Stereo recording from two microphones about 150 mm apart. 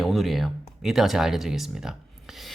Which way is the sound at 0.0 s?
Centre (ahead or behind).